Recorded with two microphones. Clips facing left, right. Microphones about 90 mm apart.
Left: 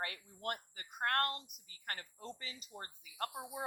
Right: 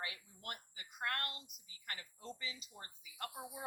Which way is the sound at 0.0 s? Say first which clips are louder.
Left 6 dB; 50° left (ahead or behind).